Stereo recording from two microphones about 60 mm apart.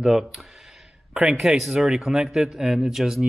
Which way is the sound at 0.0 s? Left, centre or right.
Centre.